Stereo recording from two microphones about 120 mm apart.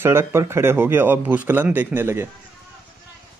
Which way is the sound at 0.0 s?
20° right (ahead or behind).